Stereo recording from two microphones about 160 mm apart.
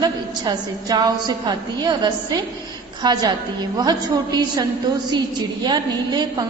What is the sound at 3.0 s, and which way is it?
A woman's voice, 25° right (ahead or behind).